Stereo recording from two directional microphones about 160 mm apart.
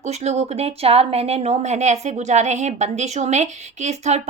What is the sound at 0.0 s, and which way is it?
Speech, 45° right (ahead or behind).